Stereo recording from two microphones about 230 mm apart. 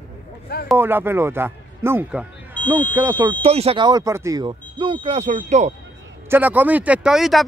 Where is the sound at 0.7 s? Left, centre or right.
Centre.